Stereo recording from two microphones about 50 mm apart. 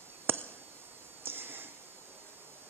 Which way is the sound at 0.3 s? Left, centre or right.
Right.